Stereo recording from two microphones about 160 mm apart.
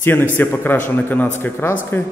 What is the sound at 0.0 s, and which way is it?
A man's voice, 15° left (ahead or behind).